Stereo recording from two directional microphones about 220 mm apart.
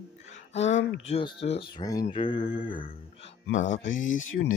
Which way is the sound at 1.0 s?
25° left (ahead or behind).